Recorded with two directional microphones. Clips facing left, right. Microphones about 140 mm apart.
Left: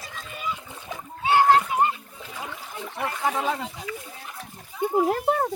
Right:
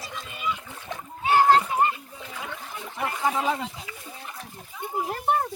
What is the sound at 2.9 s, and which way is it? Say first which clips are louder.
Speech: even; 5° right (ahead or behind).